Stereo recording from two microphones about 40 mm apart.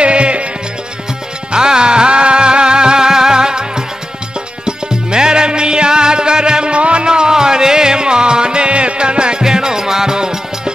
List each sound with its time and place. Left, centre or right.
0.0 s music: right
1.5 s music: right